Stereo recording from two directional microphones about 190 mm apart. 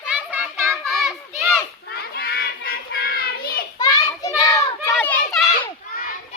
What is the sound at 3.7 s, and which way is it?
Children playing, 20° left (ahead or behind).